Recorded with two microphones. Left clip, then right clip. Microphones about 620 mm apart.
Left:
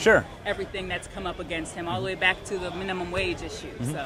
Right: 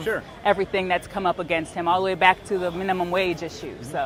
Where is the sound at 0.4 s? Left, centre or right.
Right.